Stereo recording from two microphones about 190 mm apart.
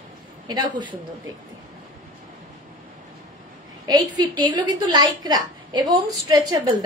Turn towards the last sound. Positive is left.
turn(degrees=-20)  # may be behind; listen again after turning